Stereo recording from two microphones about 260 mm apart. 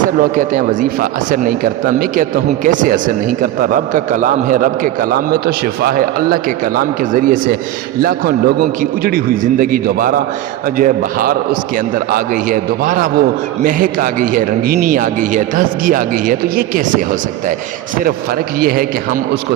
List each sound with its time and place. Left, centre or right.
0.2 s speech: right
18.6 s speech: right